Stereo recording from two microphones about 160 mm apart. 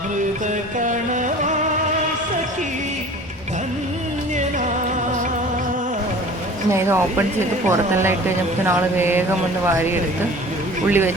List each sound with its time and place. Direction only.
0.8 s music: 50° right (ahead or behind)
6.7 s speech: 15° right (ahead or behind)